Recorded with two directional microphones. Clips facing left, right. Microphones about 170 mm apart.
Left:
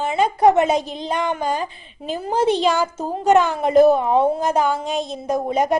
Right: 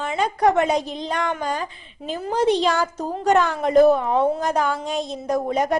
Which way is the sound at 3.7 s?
25° left (ahead or behind).